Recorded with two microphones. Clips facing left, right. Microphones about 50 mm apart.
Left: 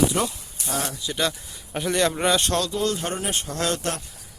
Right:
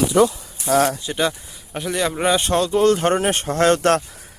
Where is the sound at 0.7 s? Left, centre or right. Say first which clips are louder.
Right 12 dB; right.